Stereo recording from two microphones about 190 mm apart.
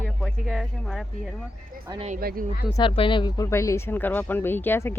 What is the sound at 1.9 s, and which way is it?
Speech, 35° right (ahead or behind).